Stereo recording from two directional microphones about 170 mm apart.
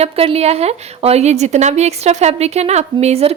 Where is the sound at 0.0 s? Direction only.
35° right (ahead or behind).